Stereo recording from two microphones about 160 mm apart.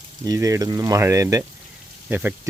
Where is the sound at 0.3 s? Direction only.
20° right (ahead or behind).